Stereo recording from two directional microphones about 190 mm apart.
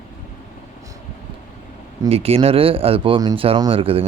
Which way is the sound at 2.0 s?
30° right (ahead or behind).